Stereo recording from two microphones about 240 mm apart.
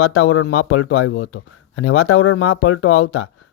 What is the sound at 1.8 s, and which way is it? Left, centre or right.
Speech, left.